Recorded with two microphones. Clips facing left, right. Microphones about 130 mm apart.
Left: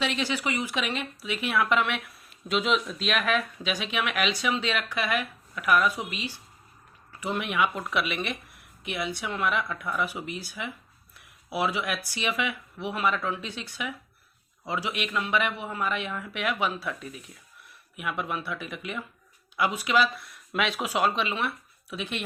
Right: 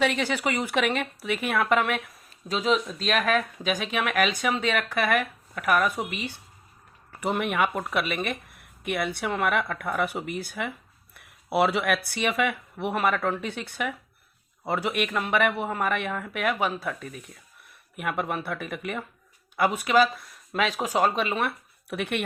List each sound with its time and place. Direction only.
0.0 s speech: 55° right (ahead or behind)